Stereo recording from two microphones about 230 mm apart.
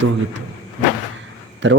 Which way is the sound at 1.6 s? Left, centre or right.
Right.